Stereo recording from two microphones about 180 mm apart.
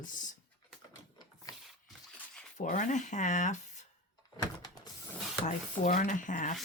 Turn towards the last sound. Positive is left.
turn(degrees=45)  # may be behind; listen again after turning